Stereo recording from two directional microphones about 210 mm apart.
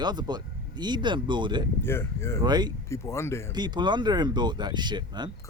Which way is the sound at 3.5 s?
20° right (ahead or behind).